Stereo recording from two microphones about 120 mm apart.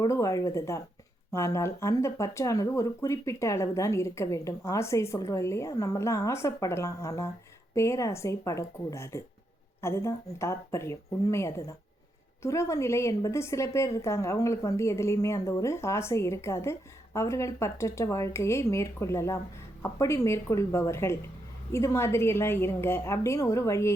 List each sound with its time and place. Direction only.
0.0 s speech: 30° left (ahead or behind)